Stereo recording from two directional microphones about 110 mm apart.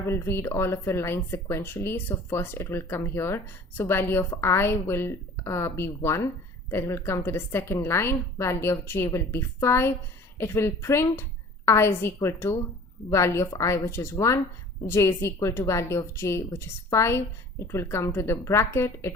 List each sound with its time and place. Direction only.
0.0 s a woman's voice: 25° left (ahead or behind)